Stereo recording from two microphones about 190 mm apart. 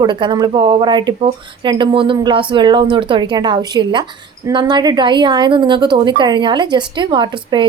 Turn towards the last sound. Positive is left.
turn(degrees=-25)  # may be behind; listen again after turning